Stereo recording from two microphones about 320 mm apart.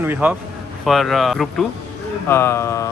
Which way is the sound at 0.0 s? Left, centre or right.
Centre.